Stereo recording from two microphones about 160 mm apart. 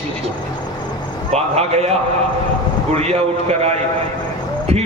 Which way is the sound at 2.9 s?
40° right (ahead or behind).